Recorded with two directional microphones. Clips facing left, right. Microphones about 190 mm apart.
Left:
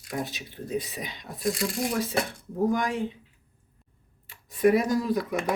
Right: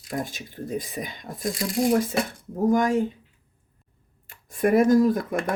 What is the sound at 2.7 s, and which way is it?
Speech, 45° right (ahead or behind).